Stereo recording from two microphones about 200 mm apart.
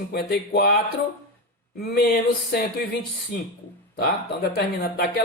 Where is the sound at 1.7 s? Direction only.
50° left (ahead or behind).